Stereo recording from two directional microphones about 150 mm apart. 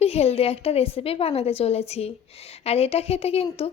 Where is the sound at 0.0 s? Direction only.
45° left (ahead or behind).